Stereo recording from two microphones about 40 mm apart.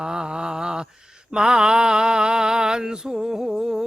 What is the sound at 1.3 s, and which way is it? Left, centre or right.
Mantra, centre.